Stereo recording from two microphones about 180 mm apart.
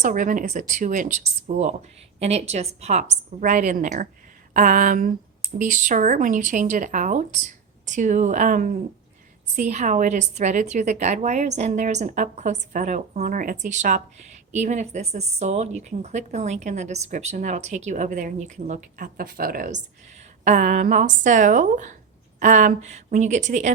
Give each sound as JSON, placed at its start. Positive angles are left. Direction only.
{"t": 0.0, "sound": "a woman's voice", "side_deg": -45}